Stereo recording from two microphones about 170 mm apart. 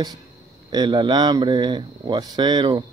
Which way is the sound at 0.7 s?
25° right (ahead or behind).